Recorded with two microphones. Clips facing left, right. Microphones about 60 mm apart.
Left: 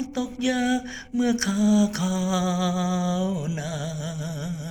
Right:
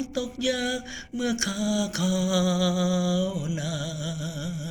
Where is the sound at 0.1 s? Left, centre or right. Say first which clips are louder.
Left 4 dB; left.